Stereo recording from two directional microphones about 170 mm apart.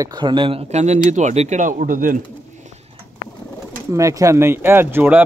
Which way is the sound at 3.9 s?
20° right (ahead or behind).